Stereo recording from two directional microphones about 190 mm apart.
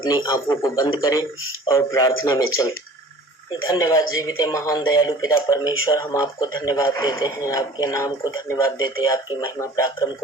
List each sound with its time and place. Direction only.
0.0 s speech: 25° left (ahead or behind)